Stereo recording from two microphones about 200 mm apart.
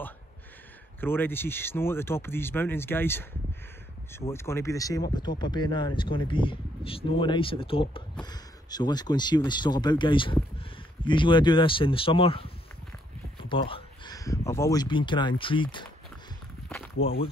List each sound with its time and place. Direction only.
1.0 s speech: 10° left (ahead or behind)
4.3 s speech: 15° left (ahead or behind)
17.0 s speech: 30° left (ahead or behind)